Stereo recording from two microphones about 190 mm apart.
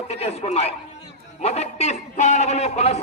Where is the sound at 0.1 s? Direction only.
35° left (ahead or behind).